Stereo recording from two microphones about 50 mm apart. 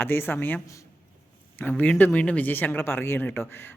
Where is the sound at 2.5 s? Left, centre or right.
Left.